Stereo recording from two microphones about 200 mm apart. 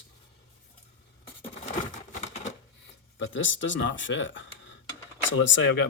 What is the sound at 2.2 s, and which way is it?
Typewriter, 35° left (ahead or behind).